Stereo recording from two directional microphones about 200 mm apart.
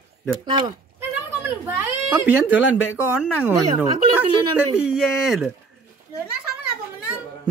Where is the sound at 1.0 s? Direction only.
10° right (ahead or behind).